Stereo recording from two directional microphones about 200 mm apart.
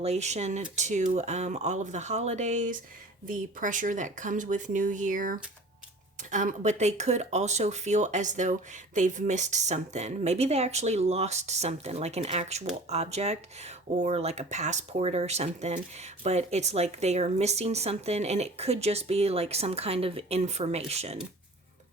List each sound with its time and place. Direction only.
0.0 s speech: 35° right (ahead or behind)